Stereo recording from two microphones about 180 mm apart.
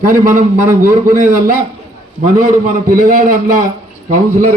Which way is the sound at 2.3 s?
50° right (ahead or behind).